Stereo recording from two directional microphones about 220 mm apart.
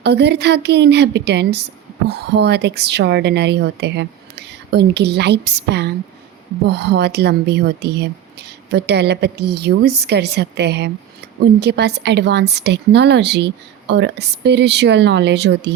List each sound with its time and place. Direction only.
0.0 s speech: 50° right (ahead or behind)